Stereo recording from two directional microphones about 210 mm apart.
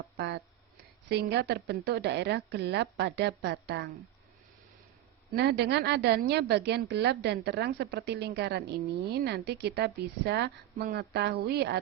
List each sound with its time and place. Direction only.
0.2 s a woman's voice: 55° right (ahead or behind)
5.3 s a woman's voice: 50° right (ahead or behind)